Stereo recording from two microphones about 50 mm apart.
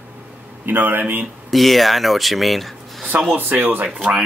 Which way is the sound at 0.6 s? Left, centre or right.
Right.